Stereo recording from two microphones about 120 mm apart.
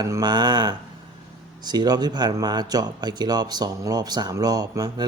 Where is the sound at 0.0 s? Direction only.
35° right (ahead or behind).